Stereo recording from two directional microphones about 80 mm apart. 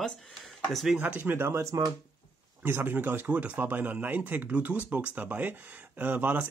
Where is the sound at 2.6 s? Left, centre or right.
Right.